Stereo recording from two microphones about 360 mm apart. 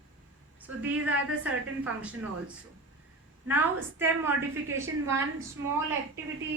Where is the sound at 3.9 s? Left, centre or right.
Centre.